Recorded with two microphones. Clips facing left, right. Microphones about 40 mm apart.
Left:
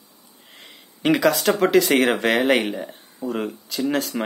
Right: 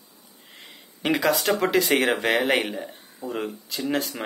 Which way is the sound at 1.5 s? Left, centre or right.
Centre.